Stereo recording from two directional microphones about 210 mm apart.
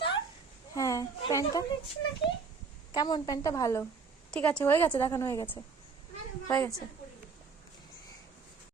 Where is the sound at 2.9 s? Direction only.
20° left (ahead or behind).